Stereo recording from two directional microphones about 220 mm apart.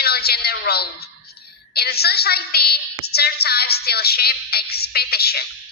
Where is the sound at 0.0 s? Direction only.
45° left (ahead or behind).